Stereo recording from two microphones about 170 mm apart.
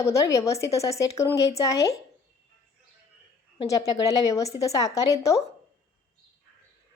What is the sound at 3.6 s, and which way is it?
Speech, 20° left (ahead or behind).